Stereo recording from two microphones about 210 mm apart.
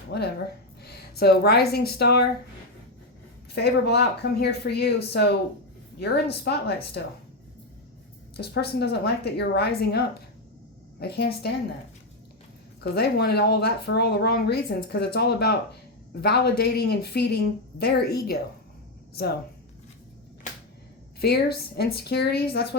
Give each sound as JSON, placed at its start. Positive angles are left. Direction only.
{"t": 0.1, "sound": "speech", "side_deg": 50}
{"t": 3.5, "sound": "speech", "side_deg": 50}
{"t": 6.4, "sound": "speech", "side_deg": 50}
{"t": 8.4, "sound": "speech", "side_deg": 50}
{"t": 12.8, "sound": "speech", "side_deg": 50}
{"t": 21.2, "sound": "speech", "side_deg": 50}